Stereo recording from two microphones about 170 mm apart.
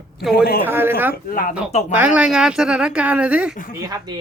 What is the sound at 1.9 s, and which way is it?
Speech, 10° right (ahead or behind).